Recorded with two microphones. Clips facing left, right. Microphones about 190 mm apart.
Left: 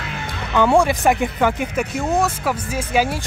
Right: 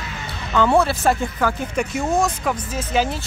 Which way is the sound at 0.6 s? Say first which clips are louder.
Left 2 dB; 15° left (ahead or behind).